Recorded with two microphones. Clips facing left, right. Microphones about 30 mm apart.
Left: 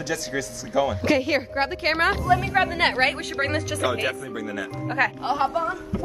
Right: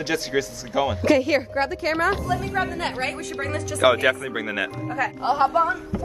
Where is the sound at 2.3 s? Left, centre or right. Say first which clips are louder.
Left 4 dB; left.